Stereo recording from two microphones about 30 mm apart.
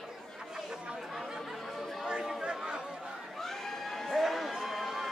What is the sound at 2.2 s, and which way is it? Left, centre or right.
Chatter, right.